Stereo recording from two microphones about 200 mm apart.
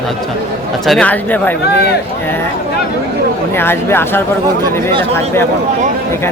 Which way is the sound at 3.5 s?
10° left (ahead or behind).